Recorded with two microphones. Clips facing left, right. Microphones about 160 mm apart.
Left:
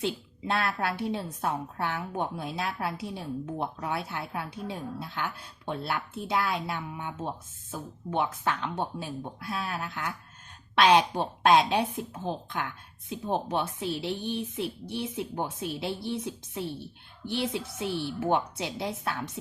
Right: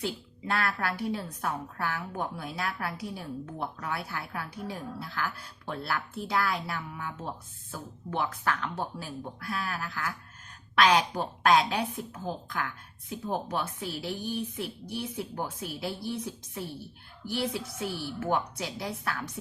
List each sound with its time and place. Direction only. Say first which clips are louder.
0.0 s a woman's voice: left 3 dB; 25° left (ahead or behind)